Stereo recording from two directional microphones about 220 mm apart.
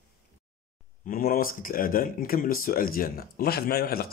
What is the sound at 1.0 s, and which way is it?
A man's voice, 40° left (ahead or behind).